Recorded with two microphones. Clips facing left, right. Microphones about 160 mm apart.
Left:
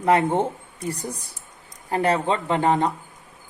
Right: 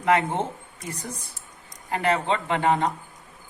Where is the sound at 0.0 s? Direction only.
35° left (ahead or behind).